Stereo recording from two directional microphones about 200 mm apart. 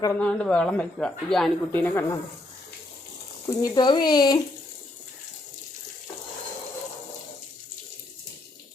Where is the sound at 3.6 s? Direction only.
20° left (ahead or behind).